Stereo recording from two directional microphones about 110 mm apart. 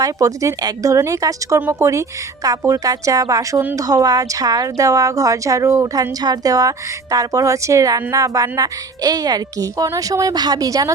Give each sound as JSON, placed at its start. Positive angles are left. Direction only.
{"t": 0.0, "sound": "a woman's voice", "side_deg": -30}